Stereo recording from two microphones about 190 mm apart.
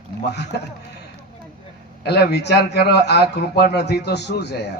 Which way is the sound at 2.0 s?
60° left (ahead or behind).